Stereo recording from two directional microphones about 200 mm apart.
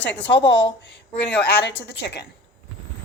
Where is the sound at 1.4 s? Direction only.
55° left (ahead or behind).